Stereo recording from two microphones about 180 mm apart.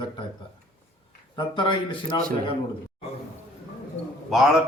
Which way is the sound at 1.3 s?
25° left (ahead or behind).